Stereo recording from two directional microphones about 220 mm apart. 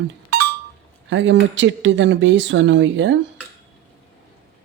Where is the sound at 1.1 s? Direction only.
55° right (ahead or behind).